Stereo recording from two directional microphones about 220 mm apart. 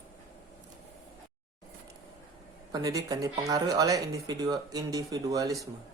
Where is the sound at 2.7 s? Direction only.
15° right (ahead or behind).